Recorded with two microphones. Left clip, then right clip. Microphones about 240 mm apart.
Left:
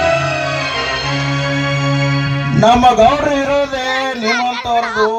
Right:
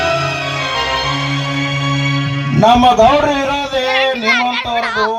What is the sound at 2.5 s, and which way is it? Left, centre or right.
Speech, left.